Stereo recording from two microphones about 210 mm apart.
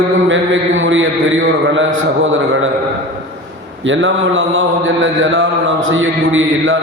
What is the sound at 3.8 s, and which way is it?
Mantra, 65° right (ahead or behind).